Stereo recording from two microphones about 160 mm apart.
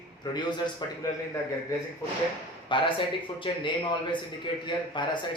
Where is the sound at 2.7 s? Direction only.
30° left (ahead or behind).